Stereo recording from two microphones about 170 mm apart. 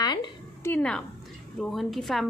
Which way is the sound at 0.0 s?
25° left (ahead or behind).